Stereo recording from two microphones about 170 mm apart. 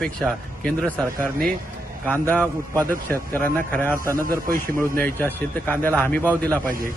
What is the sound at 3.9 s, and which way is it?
Speech, 20° right (ahead or behind).